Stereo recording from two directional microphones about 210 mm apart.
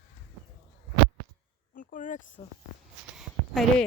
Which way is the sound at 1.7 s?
40° left (ahead or behind).